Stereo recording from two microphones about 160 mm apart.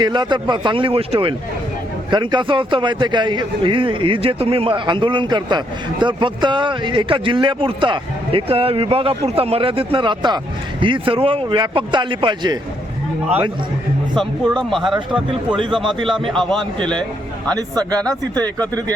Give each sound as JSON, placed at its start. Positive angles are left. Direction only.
{"t": 0.0, "sound": "a man's voice", "side_deg": -30}
{"t": 14.2, "sound": "a man's voice", "side_deg": 0}
{"t": 15.8, "sound": "a man's voice", "side_deg": -30}
{"t": 16.2, "sound": "a man's voice", "side_deg": 0}